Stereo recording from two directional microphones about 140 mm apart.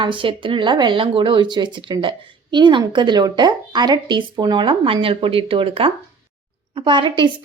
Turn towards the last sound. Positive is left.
turn(degrees=-35)  # may be behind; listen again after turning